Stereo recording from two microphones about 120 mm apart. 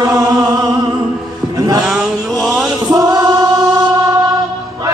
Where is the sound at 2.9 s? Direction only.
30° right (ahead or behind).